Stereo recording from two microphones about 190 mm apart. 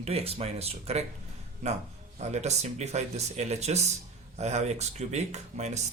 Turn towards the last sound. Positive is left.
turn(degrees=-35)  # may be behind; listen again after turning